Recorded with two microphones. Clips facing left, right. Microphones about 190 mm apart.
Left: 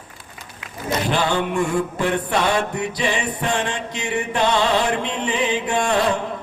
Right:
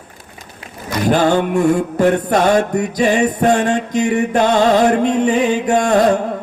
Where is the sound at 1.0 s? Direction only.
45° right (ahead or behind).